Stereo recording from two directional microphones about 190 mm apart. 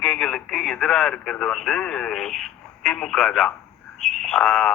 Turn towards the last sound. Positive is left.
turn(degrees=5)  # may be behind; listen again after turning